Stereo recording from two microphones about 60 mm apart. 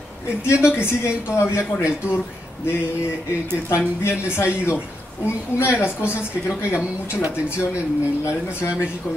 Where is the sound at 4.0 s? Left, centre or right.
Left.